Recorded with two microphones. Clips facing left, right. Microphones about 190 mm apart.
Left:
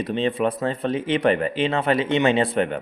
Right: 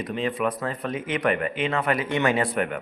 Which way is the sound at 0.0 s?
25° left (ahead or behind).